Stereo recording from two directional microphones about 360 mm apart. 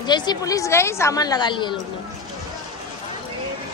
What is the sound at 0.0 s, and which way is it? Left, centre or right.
A woman's voice, centre.